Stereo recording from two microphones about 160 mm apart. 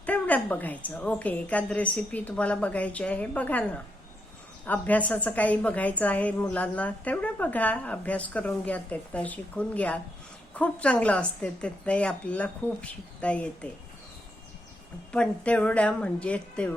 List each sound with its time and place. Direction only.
0.0 s a woman's voice: 10° left (ahead or behind)
15.1 s a woman's voice: 5° left (ahead or behind)